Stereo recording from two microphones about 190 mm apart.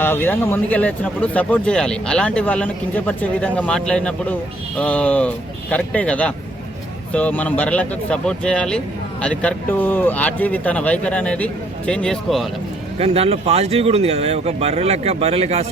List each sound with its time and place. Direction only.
0.0 s speech: 10° left (ahead or behind)
13.0 s speech: 30° right (ahead or behind)